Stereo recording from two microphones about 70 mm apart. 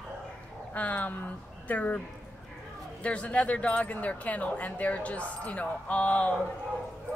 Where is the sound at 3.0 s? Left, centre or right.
Centre.